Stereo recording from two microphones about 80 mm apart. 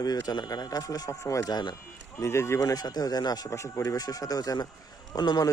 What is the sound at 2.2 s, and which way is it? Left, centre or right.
Speech, left.